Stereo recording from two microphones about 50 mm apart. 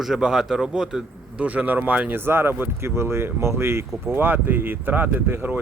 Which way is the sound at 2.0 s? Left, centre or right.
Right.